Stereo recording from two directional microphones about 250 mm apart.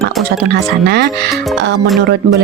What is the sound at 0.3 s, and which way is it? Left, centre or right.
Speech, right.